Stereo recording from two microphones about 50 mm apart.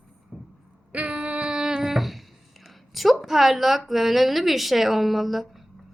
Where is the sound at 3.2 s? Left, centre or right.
Centre.